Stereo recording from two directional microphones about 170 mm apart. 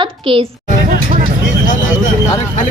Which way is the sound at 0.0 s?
30° right (ahead or behind).